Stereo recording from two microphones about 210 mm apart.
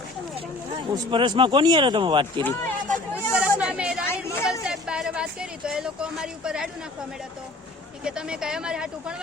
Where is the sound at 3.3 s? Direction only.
5° right (ahead or behind).